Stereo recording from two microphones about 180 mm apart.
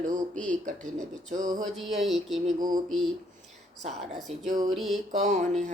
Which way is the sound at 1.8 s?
Centre (ahead or behind).